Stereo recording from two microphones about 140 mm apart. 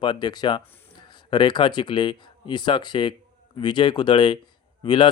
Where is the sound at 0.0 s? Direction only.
30° left (ahead or behind).